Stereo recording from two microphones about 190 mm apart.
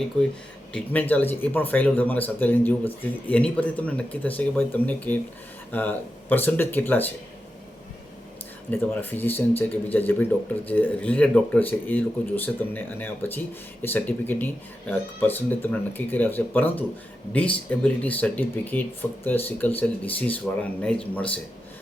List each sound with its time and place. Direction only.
0.7 s speech: 10° left (ahead or behind)
8.7 s speech: 10° left (ahead or behind)